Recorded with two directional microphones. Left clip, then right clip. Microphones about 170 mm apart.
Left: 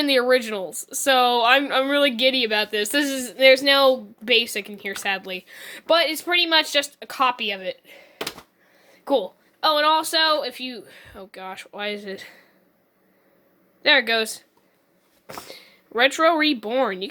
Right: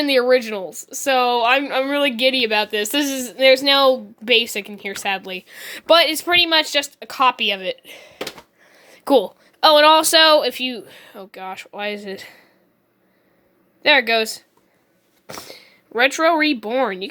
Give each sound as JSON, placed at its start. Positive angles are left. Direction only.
{"t": 0.0, "sound": "a woman's voice", "side_deg": -10}
{"t": 13.8, "sound": "speech", "side_deg": -15}